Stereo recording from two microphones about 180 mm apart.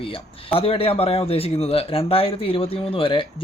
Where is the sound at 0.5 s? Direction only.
30° left (ahead or behind).